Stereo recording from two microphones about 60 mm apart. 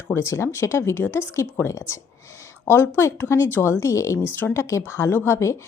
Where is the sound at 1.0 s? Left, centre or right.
Left.